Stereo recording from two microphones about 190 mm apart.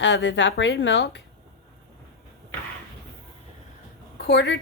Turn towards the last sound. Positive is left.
turn(degrees=65)  # may be behind; listen again after turning